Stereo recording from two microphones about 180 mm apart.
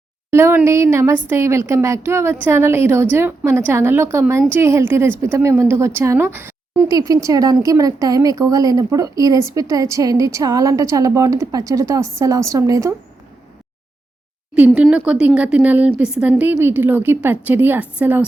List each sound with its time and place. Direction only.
0.3 s a woman's voice: 15° right (ahead or behind)
14.8 s a woman's voice: 5° right (ahead or behind)